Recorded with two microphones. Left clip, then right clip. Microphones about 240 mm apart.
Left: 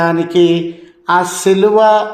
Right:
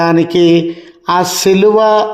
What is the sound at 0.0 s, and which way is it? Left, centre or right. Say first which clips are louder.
Speech: right 2 dB; right.